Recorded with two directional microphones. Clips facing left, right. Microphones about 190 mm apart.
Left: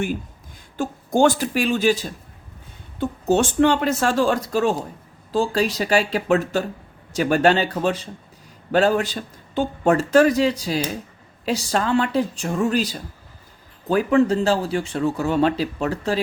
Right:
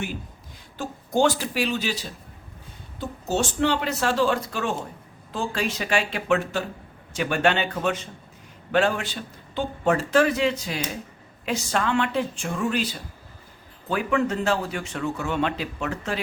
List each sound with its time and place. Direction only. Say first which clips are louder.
0.8 s speech: left 4 dB; 50° left (ahead or behind)
3.0 s a man's voice: left 7 dB; 60° left (ahead or behind); by 16.2 s 35° left (ahead or behind)